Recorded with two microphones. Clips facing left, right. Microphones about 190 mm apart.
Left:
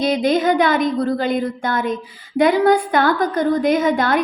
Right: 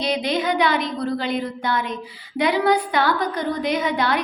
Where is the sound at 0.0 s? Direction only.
45° left (ahead or behind).